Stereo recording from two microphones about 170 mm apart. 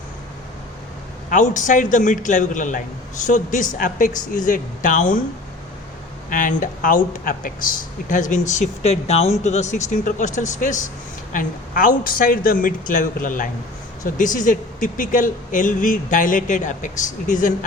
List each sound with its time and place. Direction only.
1.3 s speech: 50° left (ahead or behind)
6.3 s speech: 50° left (ahead or behind)